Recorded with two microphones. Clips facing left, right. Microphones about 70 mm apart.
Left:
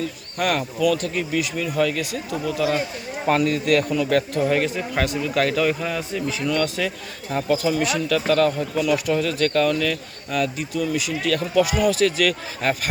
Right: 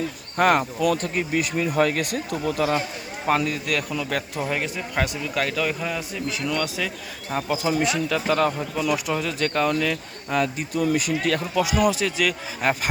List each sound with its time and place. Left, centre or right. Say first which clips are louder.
0.3 s speech: right 3 dB; right
3.2 s a man's voice: left 4 dB; centre; by 10.7 s right
10.8 s speech: right 2 dB; right
11.5 s speech: left 3 dB; centre